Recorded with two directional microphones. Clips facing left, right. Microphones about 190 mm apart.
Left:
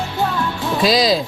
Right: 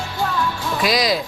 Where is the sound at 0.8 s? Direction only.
30° left (ahead or behind).